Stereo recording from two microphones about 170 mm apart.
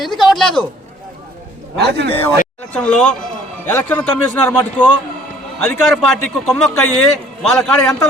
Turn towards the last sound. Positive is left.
turn(degrees=5)  # may be behind; listen again after turning